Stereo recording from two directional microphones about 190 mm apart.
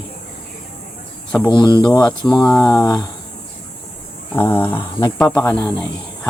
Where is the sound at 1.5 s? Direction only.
25° left (ahead or behind).